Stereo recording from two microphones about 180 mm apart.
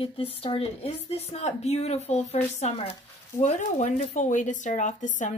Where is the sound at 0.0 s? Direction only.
30° left (ahead or behind).